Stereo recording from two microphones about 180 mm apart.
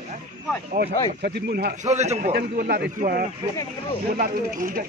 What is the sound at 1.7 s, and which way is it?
Speech, 40° right (ahead or behind).